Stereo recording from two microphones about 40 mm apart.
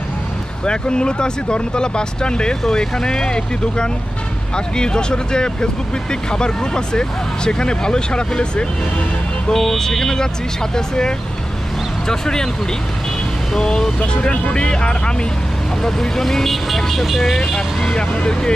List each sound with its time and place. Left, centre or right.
0.7 s speech: left
9.5 s speech: centre
12.1 s speech: centre
13.5 s speech: centre
15.8 s speech: centre
17.6 s speech: centre